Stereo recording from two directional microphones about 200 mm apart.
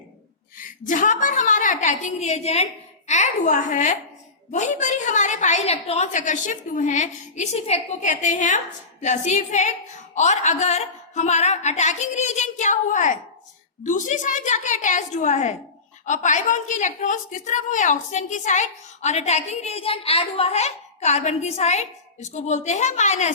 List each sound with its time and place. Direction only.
0.6 s a woman's voice: 40° left (ahead or behind)